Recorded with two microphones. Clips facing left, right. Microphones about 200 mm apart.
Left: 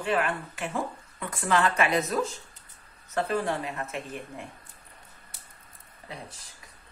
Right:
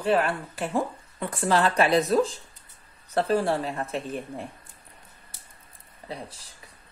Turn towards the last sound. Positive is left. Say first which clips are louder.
# right 4 dB
turn(degrees=-35)  # may be behind; listen again after turning